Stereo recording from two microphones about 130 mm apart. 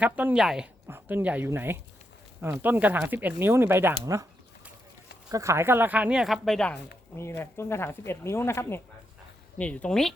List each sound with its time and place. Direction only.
0.0 s speech: 10° right (ahead or behind)
0.9 s speech: 15° right (ahead or behind)
5.3 s speech: 25° right (ahead or behind); by 6.7 s 5° left (ahead or behind)
7.2 s speech: 20° left (ahead or behind)